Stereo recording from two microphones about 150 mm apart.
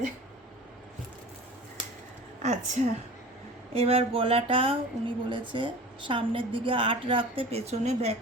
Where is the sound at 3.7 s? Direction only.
40° right (ahead or behind).